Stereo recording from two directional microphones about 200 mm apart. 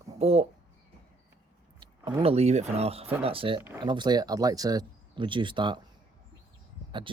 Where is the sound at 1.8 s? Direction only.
25° right (ahead or behind).